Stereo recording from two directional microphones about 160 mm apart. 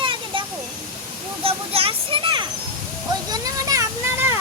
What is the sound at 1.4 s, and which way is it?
A child's voice, 35° right (ahead or behind).